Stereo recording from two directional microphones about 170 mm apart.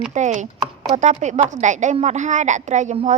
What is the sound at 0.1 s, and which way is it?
A woman's voice, 45° right (ahead or behind).